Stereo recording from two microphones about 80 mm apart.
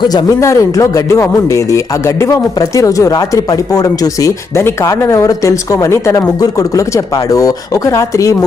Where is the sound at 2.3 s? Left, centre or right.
Left.